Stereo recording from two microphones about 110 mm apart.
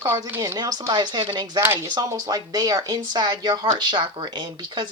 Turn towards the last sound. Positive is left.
turn(degrees=-45)  # may be behind; listen again after turning